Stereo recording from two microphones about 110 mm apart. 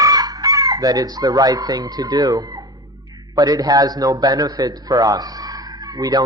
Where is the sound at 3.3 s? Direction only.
35° right (ahead or behind).